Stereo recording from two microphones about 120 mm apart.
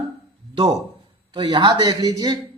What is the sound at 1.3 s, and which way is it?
Speech, 40° right (ahead or behind).